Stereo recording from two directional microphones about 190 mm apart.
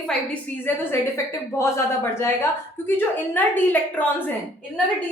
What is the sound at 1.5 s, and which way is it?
A woman's voice, 15° left (ahead or behind).